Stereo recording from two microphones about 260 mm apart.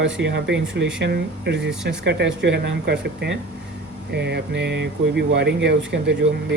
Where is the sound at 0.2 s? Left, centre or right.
Right.